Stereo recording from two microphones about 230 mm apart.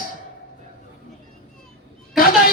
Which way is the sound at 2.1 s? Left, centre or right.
Left.